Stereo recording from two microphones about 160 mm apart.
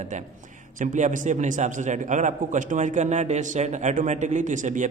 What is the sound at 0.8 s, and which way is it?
A man's voice, 50° right (ahead or behind).